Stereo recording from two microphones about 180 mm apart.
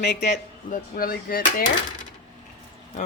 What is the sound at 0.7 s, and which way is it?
Speech, 55° left (ahead or behind).